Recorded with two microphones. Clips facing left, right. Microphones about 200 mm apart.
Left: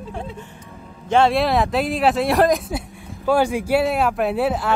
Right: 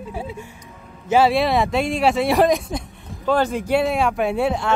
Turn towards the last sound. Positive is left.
turn(degrees=5)  # may be behind; listen again after turning